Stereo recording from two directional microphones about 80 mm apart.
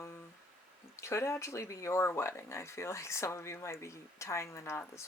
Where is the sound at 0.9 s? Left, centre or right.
Left.